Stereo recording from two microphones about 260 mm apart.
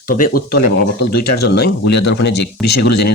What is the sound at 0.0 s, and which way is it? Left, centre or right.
Speech, left.